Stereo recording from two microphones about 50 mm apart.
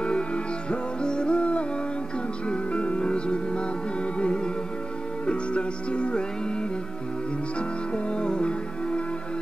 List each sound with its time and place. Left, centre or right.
0.0 s music: left